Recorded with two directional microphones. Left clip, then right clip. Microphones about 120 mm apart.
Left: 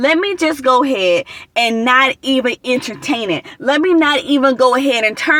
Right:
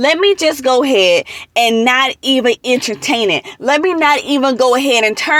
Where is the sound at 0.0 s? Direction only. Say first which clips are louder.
Right 3 dB; 15° right (ahead or behind).